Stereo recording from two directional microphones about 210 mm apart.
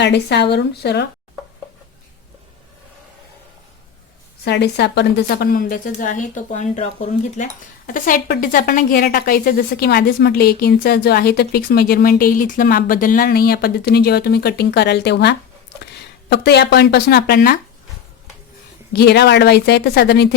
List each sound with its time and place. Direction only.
0.0 s a woman's voice: 55° left (ahead or behind)
4.4 s a woman's voice: 55° left (ahead or behind)
18.9 s a woman's voice: 50° left (ahead or behind)